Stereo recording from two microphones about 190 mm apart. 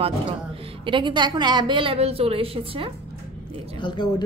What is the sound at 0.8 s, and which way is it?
A woman's voice, 25° right (ahead or behind).